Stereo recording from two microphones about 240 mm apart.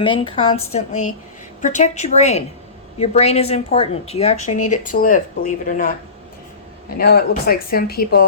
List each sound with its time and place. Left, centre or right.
0.0 s speech: left
6.9 s speech: left